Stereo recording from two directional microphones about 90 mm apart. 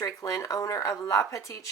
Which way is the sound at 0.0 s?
35° left (ahead or behind).